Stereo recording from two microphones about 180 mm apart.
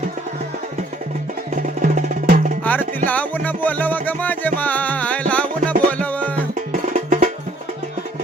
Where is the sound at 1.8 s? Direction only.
45° right (ahead or behind).